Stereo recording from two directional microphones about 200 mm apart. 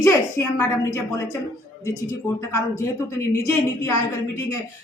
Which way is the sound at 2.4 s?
15° left (ahead or behind).